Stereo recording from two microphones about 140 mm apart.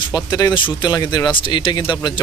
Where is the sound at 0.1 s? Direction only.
30° left (ahead or behind).